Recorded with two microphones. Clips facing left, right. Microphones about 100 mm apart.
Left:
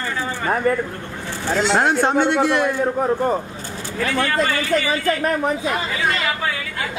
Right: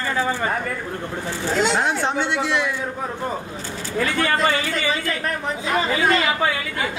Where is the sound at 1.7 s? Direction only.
55° left (ahead or behind).